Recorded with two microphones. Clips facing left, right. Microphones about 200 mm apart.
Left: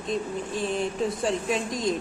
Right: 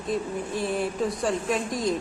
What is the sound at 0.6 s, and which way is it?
Speech, 10° right (ahead or behind).